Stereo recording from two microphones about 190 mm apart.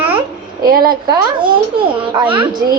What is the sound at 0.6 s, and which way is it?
Speech, 50° right (ahead or behind).